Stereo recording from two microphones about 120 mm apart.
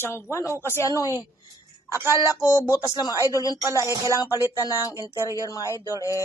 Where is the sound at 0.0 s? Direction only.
20° left (ahead or behind).